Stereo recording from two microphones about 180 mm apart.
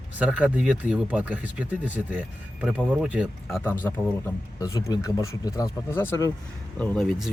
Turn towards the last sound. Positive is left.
turn(degrees=0)  # may be behind; listen again after turning